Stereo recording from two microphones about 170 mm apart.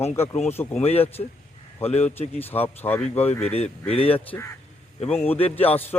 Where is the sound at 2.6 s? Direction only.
10° left (ahead or behind).